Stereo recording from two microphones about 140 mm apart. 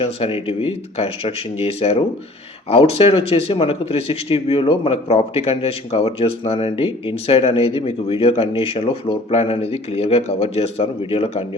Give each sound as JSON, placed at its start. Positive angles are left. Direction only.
{"t": 0.0, "sound": "a man's voice", "side_deg": 40}